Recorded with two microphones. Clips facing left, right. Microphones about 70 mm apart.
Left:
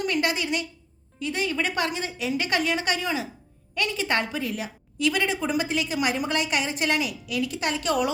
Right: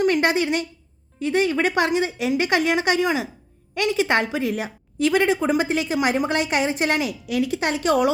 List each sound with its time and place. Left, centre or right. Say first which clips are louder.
0.0 s a woman's voice: right 7 dB; right